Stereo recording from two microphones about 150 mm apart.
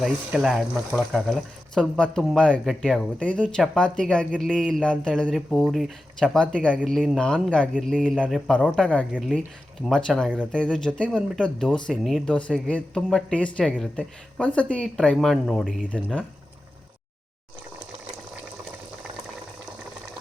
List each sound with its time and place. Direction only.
0.0 s speech: 5° right (ahead or behind)
9.1 s speech: 5° right (ahead or behind)